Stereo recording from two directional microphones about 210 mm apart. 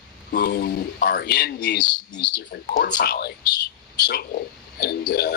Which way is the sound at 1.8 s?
20° left (ahead or behind).